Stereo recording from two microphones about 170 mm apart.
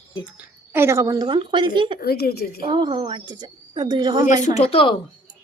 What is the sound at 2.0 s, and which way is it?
Speech, 65° left (ahead or behind).